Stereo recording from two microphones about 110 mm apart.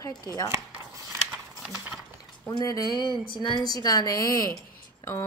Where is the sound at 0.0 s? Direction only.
30° left (ahead or behind).